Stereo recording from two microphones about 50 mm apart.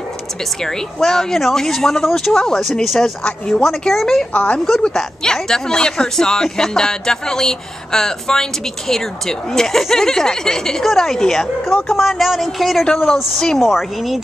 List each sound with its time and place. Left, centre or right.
0.6 s speech: centre
4.3 s speech: left
4.9 s speech: centre
12.8 s speech: centre
13.6 s speech: centre